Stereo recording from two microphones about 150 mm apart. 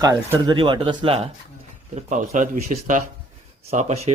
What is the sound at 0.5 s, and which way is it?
Speech, 35° right (ahead or behind).